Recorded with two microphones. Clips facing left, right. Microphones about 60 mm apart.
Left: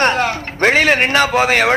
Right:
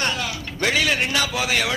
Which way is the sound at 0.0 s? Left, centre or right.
Left.